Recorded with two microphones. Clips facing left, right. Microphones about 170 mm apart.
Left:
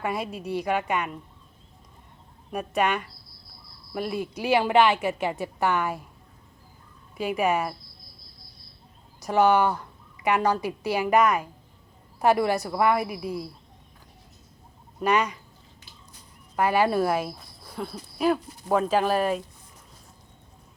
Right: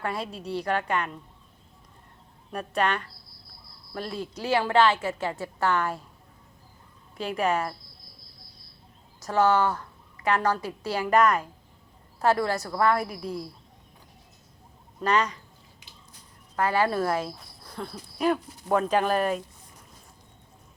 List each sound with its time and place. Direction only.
0.0 s speech: 10° left (ahead or behind)
2.5 s speech: 10° left (ahead or behind)
7.2 s speech: 10° left (ahead or behind)
9.2 s speech: 15° left (ahead or behind)
15.0 s speech: 10° left (ahead or behind)
16.6 s speech: 15° left (ahead or behind)